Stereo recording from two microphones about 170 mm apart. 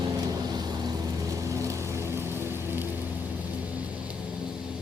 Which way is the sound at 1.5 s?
20° right (ahead or behind).